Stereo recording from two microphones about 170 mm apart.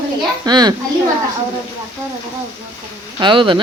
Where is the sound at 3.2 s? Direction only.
30° right (ahead or behind).